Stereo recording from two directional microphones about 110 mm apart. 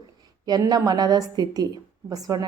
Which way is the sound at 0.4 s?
35° right (ahead or behind).